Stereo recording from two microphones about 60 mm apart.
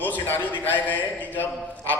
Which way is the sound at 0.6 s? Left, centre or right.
Left.